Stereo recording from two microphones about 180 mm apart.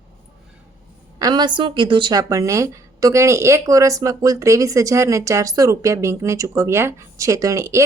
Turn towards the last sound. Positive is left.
turn(degrees=-15)  # may be behind; listen again after turning